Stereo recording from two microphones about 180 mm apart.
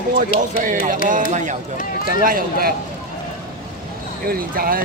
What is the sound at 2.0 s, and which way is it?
Speech, 55° right (ahead or behind).